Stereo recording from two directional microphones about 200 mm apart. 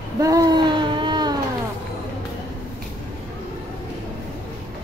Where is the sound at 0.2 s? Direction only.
15° right (ahead or behind).